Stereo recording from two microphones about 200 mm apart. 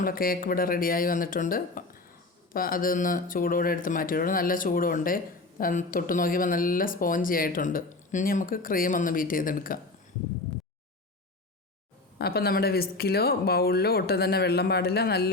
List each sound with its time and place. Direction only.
0.0 s speech: 45° left (ahead or behind)
12.2 s speech: 50° left (ahead or behind)